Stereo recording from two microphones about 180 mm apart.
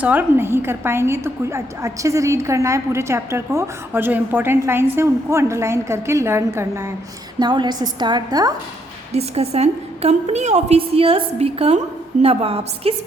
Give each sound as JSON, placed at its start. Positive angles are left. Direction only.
{"t": 0.0, "sound": "a woman's voice", "side_deg": -10}
{"t": 9.1, "sound": "a woman's voice", "side_deg": -35}